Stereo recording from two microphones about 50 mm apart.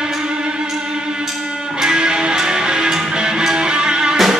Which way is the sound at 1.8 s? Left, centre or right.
Centre.